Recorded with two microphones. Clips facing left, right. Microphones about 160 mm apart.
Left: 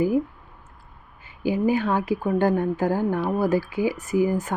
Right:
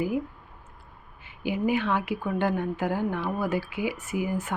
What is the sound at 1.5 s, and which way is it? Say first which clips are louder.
Speech: left 4 dB; 40° left (ahead or behind).